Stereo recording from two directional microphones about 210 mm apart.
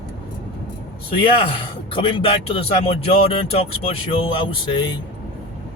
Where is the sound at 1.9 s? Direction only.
25° left (ahead or behind).